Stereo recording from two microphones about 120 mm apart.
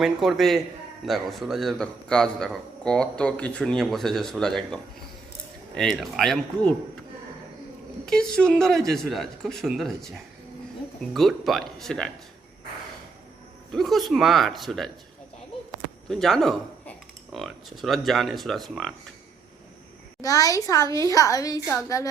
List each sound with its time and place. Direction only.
0.0 s a man's voice: centre (ahead or behind)
8.0 s a man's voice: 5° left (ahead or behind)
13.7 s a man's voice: centre (ahead or behind)
16.0 s a man's voice: centre (ahead or behind)
20.2 s a woman's voice: 30° left (ahead or behind)